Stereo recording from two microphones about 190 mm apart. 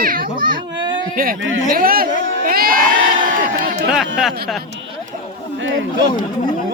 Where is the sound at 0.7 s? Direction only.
25° right (ahead or behind).